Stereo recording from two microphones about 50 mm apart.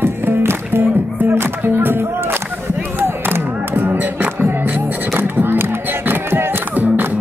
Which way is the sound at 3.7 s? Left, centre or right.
Right.